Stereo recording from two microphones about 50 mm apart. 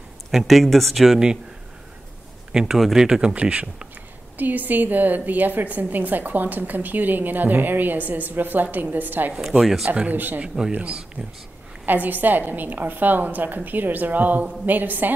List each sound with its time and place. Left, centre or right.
0.3 s speech: centre
2.5 s speech: centre
4.4 s a woman's voice: right
9.4 s speech: centre
10.1 s a woman's voice: right
10.7 s speech: right
11.8 s a woman's voice: right